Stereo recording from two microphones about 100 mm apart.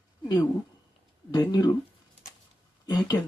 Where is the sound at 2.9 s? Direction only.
40° left (ahead or behind).